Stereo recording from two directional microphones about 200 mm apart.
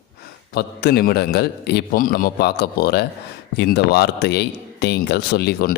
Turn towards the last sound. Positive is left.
turn(degrees=55)  # may be behind; listen again after turning